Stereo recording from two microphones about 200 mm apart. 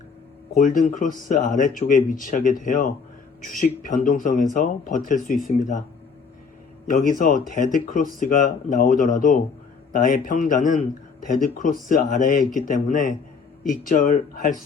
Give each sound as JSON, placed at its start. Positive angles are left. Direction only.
{"t": 0.5, "sound": "speech", "side_deg": 40}
{"t": 6.8, "sound": "speech", "side_deg": 45}